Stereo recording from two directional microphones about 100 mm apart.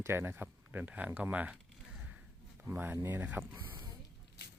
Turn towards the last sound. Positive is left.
turn(degrees=-20)  # may be behind; listen again after turning